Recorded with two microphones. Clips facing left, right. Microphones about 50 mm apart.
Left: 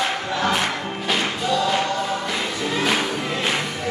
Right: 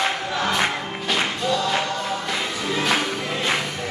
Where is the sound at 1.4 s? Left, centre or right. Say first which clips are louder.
Left 4 dB; centre.